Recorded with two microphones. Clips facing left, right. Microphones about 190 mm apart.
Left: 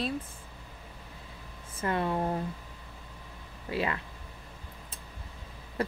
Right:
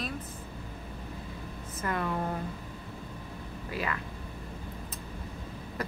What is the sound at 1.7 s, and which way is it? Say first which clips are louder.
Speech: left 2 dB; 25° left (ahead or behind).